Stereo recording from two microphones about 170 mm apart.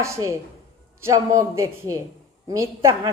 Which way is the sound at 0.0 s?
15° right (ahead or behind).